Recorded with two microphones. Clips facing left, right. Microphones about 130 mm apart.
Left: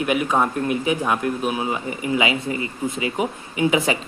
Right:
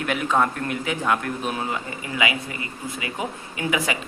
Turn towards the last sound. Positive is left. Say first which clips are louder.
# left 6 dB
turn(degrees=25)  # may be behind; listen again after turning